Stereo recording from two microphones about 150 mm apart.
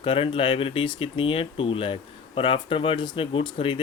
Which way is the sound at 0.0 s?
35° left (ahead or behind).